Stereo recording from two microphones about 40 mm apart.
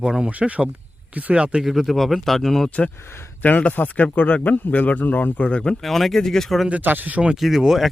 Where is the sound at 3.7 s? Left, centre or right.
Left.